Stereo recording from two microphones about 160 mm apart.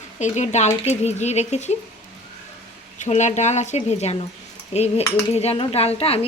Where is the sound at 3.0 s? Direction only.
45° left (ahead or behind).